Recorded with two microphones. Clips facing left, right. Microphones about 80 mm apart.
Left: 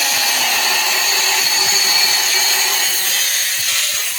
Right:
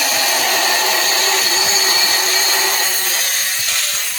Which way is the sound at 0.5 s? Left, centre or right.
Right.